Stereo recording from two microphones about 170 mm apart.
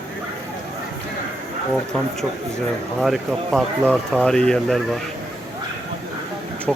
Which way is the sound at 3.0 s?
Centre (ahead or behind).